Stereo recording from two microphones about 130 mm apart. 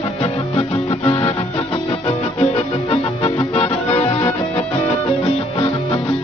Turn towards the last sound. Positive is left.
turn(degrees=50)  # may be behind; listen again after turning